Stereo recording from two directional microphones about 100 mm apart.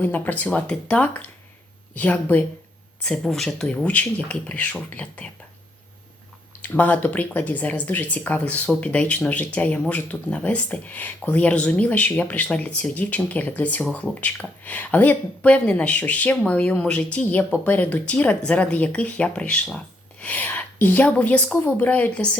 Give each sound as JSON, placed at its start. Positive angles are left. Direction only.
{"t": 0.0, "sound": "speech", "side_deg": 15}
{"t": 3.7, "sound": "speech", "side_deg": 15}
{"t": 6.6, "sound": "a woman's voice", "side_deg": 15}